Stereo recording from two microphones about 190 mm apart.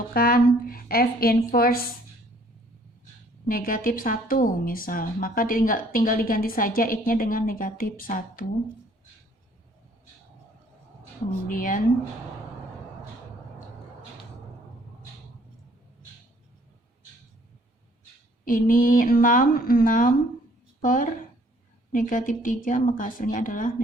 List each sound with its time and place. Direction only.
0.1 s a woman's voice: 50° left (ahead or behind)
3.5 s a woman's voice: 50° left (ahead or behind)
11.4 s a woman's voice: 45° left (ahead or behind)
18.4 s a woman's voice: 45° left (ahead or behind)